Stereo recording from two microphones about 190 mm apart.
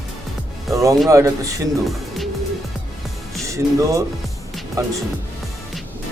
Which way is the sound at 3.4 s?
15° right (ahead or behind).